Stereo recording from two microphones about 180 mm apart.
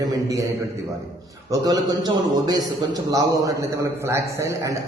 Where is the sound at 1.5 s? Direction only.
20° right (ahead or behind).